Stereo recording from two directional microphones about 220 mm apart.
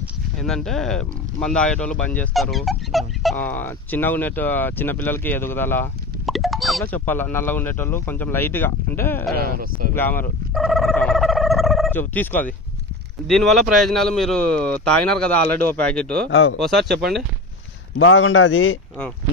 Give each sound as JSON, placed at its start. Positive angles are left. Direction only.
{"t": 0.0, "sound": "speech", "side_deg": 0}
{"t": 9.3, "sound": "speech", "side_deg": -40}
{"t": 9.9, "sound": "speech", "side_deg": 10}
{"t": 16.3, "sound": "a man's voice", "side_deg": 60}
{"t": 16.5, "sound": "speech", "side_deg": 0}
{"t": 17.9, "sound": "a man's voice", "side_deg": 65}